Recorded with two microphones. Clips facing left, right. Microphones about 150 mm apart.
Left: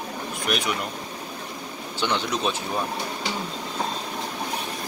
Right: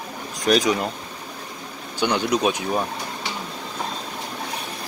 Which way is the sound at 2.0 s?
10° right (ahead or behind).